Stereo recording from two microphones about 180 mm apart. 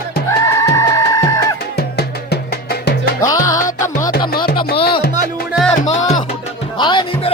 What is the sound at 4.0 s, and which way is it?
Music, 55° left (ahead or behind).